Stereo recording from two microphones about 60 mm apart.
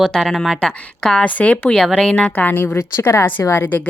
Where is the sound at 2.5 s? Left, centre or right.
Left.